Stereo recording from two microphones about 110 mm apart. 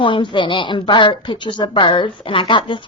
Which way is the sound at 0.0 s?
50° left (ahead or behind).